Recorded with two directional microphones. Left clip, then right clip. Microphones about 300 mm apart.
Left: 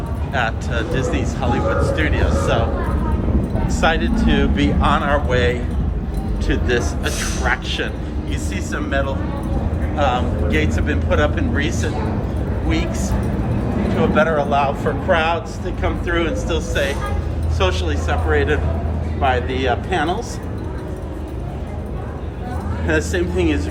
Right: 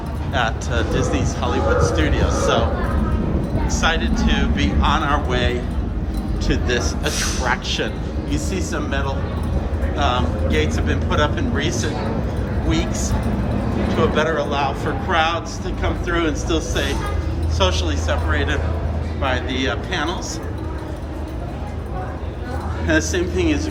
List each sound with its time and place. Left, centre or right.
0.3 s speech: centre
3.7 s speech: centre
22.9 s speech: centre